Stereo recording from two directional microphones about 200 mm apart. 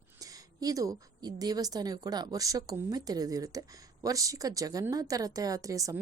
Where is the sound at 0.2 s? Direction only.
20° right (ahead or behind).